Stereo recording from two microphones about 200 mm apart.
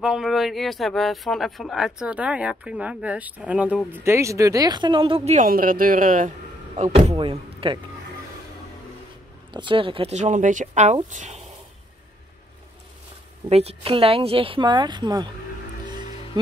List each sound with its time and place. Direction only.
0.0 s speech: centre (ahead or behind); by 5.5 s 35° right (ahead or behind)
5.5 s speech: 45° right (ahead or behind); by 7.8 s 25° right (ahead or behind)
9.5 s speech: 25° right (ahead or behind)
13.5 s speech: 30° right (ahead or behind)